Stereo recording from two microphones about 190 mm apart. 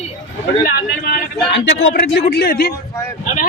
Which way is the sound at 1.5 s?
65° left (ahead or behind).